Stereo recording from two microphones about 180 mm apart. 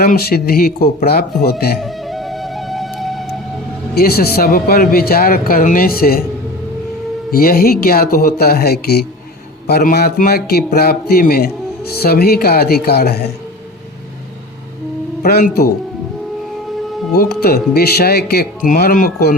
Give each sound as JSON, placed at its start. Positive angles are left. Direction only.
{"t": 0.0, "sound": "a man's voice", "side_deg": 60}
{"t": 1.8, "sound": "music", "side_deg": 0}
{"t": 3.9, "sound": "a man's voice", "side_deg": 60}
{"t": 7.3, "sound": "a man's voice", "side_deg": 55}
{"t": 15.2, "sound": "a man's voice", "side_deg": 55}
{"t": 17.2, "sound": "a man's voice", "side_deg": 60}